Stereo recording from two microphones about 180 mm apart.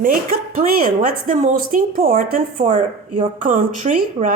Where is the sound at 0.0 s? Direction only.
50° right (ahead or behind).